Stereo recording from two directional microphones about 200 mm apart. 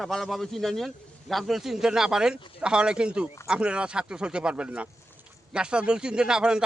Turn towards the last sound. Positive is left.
turn(degrees=-5)  # may be behind; listen again after turning